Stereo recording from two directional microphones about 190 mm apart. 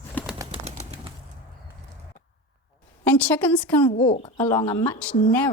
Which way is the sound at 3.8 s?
30° left (ahead or behind).